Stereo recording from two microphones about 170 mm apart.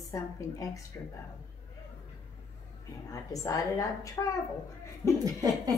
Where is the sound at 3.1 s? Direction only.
20° left (ahead or behind).